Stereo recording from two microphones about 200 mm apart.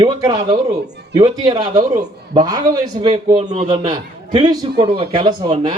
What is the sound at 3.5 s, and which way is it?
Speech, 35° right (ahead or behind).